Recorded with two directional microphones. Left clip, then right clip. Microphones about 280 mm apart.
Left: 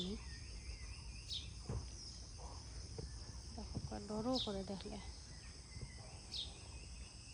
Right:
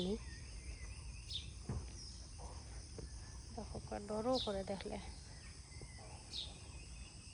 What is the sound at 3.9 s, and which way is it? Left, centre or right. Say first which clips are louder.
Speech: right 4 dB; centre.